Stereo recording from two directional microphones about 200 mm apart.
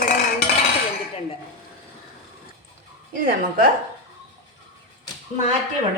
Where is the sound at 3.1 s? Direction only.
45° right (ahead or behind).